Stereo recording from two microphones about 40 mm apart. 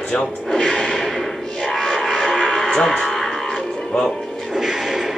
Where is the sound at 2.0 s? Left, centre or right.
Centre.